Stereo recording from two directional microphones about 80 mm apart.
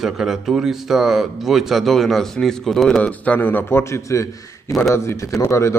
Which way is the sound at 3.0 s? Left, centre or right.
Centre.